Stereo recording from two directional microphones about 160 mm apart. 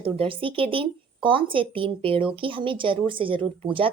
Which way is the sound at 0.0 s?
35° right (ahead or behind).